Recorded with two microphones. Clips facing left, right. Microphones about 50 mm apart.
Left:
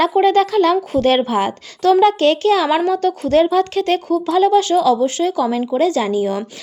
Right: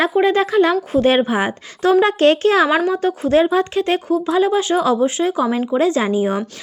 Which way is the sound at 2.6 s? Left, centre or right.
Centre.